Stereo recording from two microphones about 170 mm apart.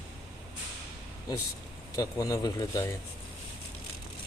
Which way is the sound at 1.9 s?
20° left (ahead or behind).